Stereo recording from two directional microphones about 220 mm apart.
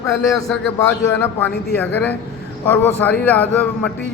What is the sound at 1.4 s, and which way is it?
A man's voice, 10° left (ahead or behind).